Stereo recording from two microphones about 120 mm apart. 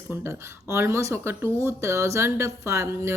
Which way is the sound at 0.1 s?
25° right (ahead or behind).